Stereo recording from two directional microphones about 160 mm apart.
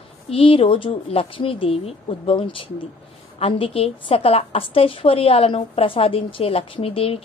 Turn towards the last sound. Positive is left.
turn(degrees=35)  # may be behind; listen again after turning